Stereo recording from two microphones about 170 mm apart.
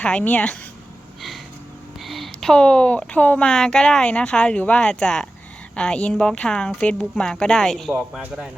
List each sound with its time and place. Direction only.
0.0 s speech: 5° left (ahead or behind)
2.0 s a man's voice: centre (ahead or behind)